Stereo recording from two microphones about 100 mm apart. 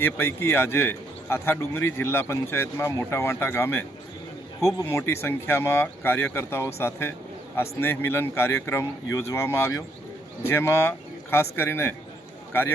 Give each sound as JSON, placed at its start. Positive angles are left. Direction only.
{"t": 0.0, "sound": "a man's voice", "side_deg": 25}